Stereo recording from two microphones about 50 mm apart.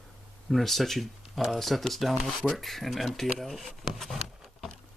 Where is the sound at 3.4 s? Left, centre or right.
Centre.